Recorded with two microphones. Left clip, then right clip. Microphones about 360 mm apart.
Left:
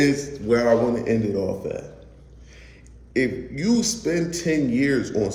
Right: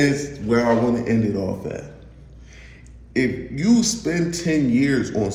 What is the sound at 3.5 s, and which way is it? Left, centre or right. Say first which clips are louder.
A man's voice: right 3 dB; centre.